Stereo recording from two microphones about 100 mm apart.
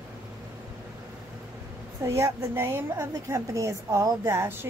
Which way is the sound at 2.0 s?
25° right (ahead or behind).